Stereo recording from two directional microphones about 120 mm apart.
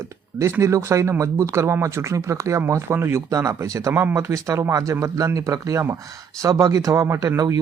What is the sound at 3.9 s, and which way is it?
Speech, 15° right (ahead or behind).